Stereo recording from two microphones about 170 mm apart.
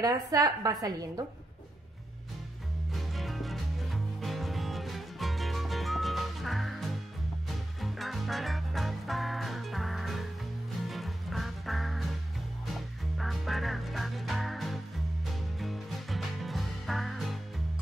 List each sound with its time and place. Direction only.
0.0 s a woman's voice: 20° right (ahead or behind)
2.9 s music: centre (ahead or behind)